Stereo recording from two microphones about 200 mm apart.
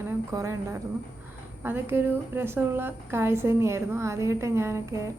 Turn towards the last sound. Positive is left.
turn(degrees=-15)  # may be behind; listen again after turning